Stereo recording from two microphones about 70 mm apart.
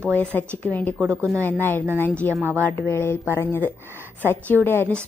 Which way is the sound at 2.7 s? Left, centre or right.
Left.